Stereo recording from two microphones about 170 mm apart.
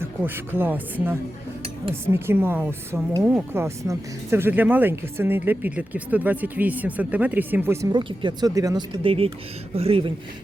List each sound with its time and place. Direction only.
0.0 s speech: 15° right (ahead or behind)
1.6 s dishes: 35° right (ahead or behind)
2.1 s speech: 15° right (ahead or behind); by 10.1 s 35° right (ahead or behind)